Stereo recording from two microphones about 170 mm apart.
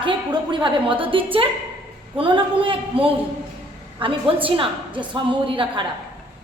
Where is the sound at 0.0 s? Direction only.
25° right (ahead or behind).